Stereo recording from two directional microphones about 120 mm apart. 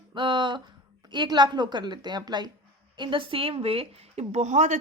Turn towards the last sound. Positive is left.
turn(degrees=-85)